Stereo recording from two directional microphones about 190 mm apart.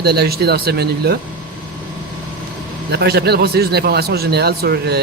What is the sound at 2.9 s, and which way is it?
Speech, 60° right (ahead or behind).